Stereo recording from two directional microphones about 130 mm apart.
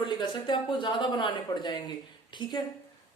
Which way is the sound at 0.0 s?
35° left (ahead or behind).